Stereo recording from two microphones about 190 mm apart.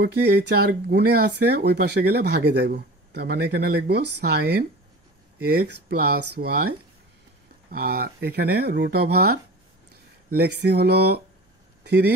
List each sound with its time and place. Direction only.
0.0 s speech: 55° right (ahead or behind)
7.7 s speech: 55° right (ahead or behind)